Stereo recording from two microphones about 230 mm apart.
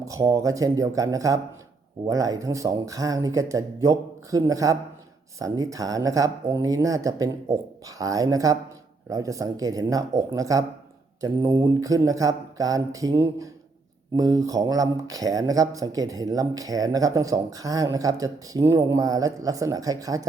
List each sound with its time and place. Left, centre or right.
0.0 s speech: centre